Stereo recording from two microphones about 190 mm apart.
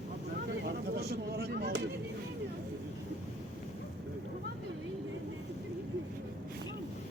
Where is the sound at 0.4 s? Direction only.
55° right (ahead or behind).